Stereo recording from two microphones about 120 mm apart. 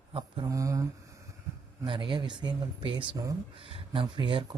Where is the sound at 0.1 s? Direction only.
45° right (ahead or behind).